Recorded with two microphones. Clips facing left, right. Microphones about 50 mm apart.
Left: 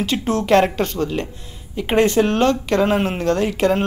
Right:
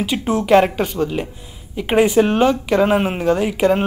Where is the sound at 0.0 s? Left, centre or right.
Centre.